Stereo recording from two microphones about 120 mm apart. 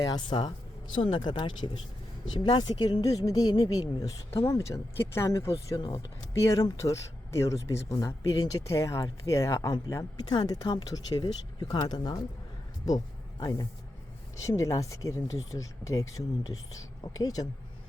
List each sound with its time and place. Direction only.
0.0 s a woman's voice: 35° left (ahead or behind)
13.4 s a woman's voice: 35° left (ahead or behind)